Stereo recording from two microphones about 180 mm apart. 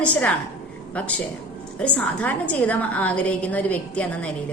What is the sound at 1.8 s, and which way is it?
A woman's voice, 10° left (ahead or behind).